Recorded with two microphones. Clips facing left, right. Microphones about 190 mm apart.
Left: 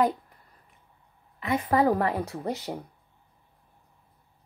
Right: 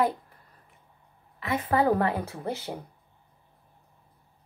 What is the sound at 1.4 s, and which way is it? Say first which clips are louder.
Speech: left 1 dB; 15° left (ahead or behind).